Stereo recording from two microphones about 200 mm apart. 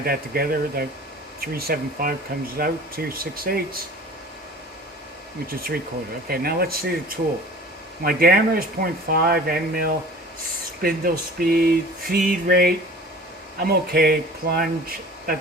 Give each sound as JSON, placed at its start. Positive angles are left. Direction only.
{"t": 0.0, "sound": "speech", "side_deg": -50}
{"t": 5.5, "sound": "speech", "side_deg": -50}